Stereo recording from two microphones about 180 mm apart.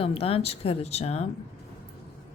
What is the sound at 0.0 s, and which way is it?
A woman's voice, 30° left (ahead or behind).